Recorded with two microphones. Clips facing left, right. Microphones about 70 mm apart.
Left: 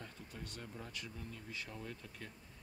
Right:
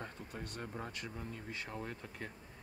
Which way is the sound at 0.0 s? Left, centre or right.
Right.